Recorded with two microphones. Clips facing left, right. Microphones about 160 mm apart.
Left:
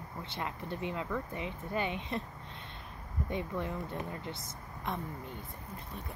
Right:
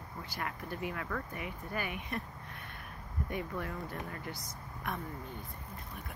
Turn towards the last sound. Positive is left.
turn(degrees=20)  # may be behind; listen again after turning